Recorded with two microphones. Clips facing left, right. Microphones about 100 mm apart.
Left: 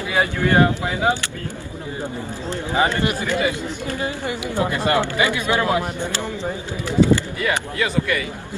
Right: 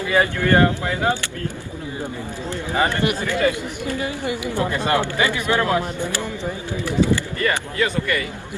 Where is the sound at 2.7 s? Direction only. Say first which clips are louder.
Even; 20° left (ahead or behind).